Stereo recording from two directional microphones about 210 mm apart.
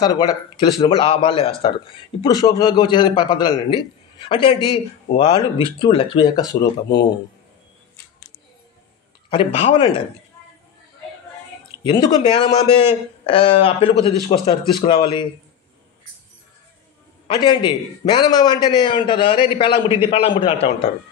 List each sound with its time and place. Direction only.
0.0 s a man's voice: 20° left (ahead or behind)
6.6 s speech: 55° left (ahead or behind)
9.3 s a man's voice: 25° left (ahead or behind)
11.8 s a man's voice: 20° left (ahead or behind)
17.4 s a man's voice: 20° left (ahead or behind)